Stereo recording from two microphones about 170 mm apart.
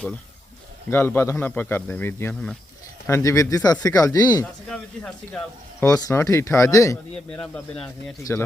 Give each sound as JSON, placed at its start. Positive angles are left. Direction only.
{"t": 0.9, "sound": "speech", "side_deg": 15}
{"t": 4.7, "sound": "speech", "side_deg": 5}
{"t": 5.8, "sound": "speech", "side_deg": 15}
{"t": 7.3, "sound": "speech", "side_deg": 5}